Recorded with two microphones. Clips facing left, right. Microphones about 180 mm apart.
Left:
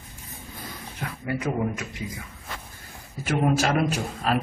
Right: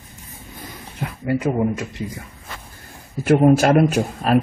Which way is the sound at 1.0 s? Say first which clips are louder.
Right 7 dB; 25° right (ahead or behind).